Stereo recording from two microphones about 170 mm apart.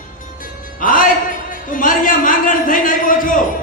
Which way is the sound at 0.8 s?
55° left (ahead or behind).